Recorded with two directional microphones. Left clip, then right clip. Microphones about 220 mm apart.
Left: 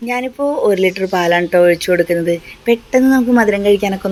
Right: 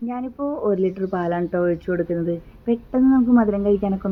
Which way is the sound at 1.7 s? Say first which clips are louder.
Left 10 dB; 45° left (ahead or behind).